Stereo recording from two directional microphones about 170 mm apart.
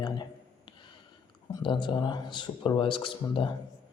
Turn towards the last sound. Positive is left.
turn(degrees=30)  # may be behind; listen again after turning